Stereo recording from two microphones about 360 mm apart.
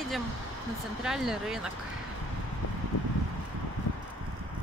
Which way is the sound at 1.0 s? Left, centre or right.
Centre.